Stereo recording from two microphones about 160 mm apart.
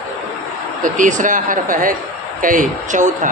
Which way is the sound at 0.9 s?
55° right (ahead or behind).